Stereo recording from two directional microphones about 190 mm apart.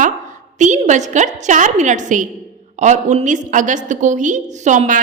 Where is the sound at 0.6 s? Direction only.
40° right (ahead or behind).